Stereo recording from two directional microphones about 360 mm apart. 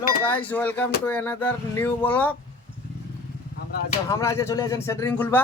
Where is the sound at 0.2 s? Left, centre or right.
Centre.